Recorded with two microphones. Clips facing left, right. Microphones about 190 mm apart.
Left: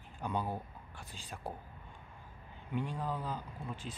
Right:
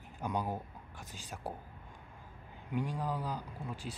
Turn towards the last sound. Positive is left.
turn(degrees=-10)  # may be behind; listen again after turning